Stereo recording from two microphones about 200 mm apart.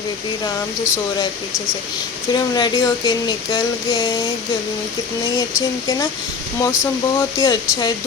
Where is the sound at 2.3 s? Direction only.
20° left (ahead or behind).